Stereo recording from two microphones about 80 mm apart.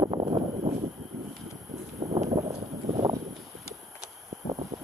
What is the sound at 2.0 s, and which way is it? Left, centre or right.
Clip-clop, right.